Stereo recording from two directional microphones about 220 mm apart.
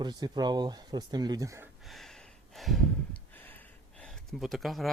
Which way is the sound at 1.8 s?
Centre (ahead or behind).